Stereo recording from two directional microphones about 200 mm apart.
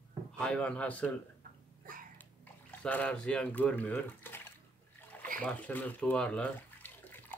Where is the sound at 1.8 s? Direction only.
45° right (ahead or behind).